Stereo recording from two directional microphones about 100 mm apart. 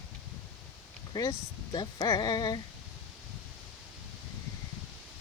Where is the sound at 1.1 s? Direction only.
40° left (ahead or behind).